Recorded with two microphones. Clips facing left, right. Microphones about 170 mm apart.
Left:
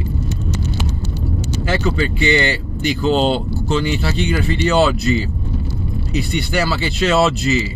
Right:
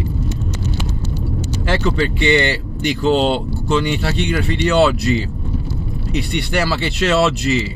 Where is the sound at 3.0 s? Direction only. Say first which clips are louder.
Right 1 dB; 60° right (ahead or behind).